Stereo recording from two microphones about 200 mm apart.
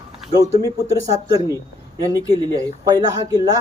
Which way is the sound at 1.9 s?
20° right (ahead or behind).